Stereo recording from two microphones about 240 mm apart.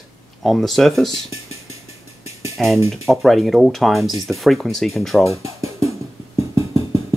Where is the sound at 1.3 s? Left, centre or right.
Right.